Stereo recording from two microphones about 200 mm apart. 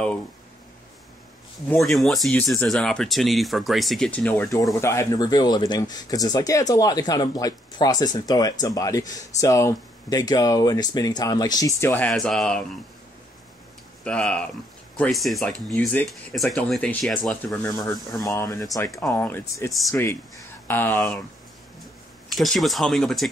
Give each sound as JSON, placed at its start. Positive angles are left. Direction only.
{"t": 1.7, "sound": "speech", "side_deg": 0}
{"t": 14.0, "sound": "speech", "side_deg": 5}
{"t": 17.6, "sound": "speech", "side_deg": 15}
{"t": 22.3, "sound": "speech", "side_deg": 0}